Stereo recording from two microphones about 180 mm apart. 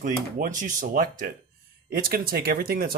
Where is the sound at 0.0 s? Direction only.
45° right (ahead or behind).